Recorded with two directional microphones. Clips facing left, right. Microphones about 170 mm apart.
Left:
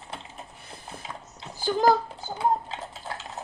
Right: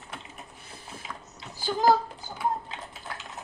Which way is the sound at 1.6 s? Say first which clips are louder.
Left 2 dB; 50° left (ahead or behind).